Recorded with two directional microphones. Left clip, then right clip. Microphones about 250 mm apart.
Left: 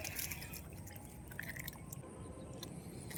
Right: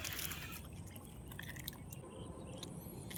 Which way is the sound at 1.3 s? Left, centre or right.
Centre.